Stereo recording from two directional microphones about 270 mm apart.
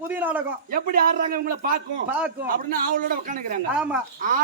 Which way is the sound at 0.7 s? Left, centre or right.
Right.